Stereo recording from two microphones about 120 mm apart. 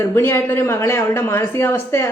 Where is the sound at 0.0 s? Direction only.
20° left (ahead or behind).